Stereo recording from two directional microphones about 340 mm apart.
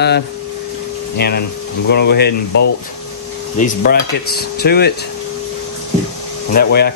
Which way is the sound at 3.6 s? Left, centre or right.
Left.